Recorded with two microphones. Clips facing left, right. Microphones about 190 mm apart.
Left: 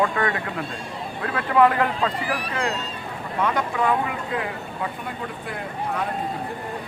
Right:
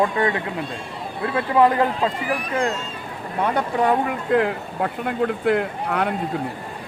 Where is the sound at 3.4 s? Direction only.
35° right (ahead or behind).